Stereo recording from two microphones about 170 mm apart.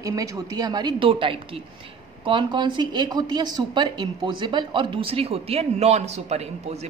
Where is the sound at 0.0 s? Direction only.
20° right (ahead or behind).